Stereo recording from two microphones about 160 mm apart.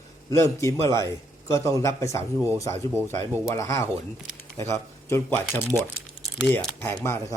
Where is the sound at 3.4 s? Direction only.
20° left (ahead or behind).